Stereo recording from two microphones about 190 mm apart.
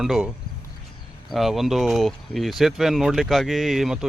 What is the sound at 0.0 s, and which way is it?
Speech, centre (ahead or behind).